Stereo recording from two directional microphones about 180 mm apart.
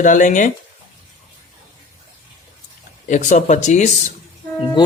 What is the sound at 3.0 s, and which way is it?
Speech, 45° left (ahead or behind).